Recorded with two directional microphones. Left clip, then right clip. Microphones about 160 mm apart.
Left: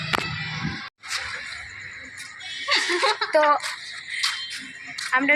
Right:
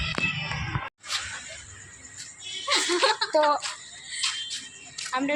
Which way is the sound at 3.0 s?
35° right (ahead or behind).